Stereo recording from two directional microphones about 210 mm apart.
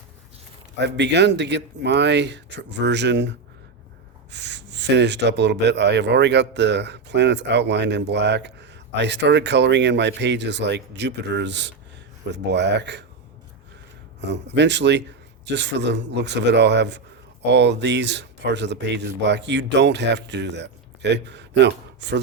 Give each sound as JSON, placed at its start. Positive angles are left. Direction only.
{"t": 0.8, "sound": "speech", "side_deg": -55}
{"t": 14.2, "sound": "speech", "side_deg": -55}